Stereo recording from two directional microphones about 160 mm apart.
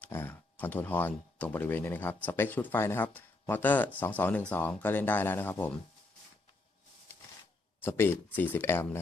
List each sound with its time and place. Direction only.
0.0 s speech: 10° left (ahead or behind)
7.8 s speech: 15° left (ahead or behind)